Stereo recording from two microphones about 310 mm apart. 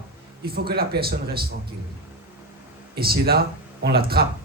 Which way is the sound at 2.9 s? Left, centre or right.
Right.